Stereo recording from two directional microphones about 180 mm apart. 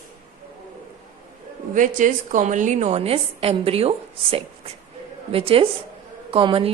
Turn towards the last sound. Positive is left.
turn(degrees=-30)  # may be behind; listen again after turning